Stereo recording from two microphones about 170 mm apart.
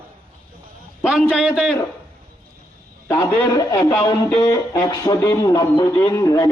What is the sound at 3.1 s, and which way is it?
Speech, 25° left (ahead or behind).